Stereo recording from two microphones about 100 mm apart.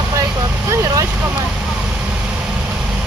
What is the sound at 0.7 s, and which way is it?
Speech, 30° right (ahead or behind).